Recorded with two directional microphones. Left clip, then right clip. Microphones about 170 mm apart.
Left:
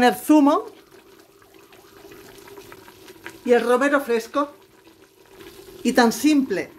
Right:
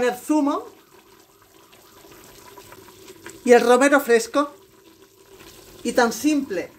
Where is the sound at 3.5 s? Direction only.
35° right (ahead or behind).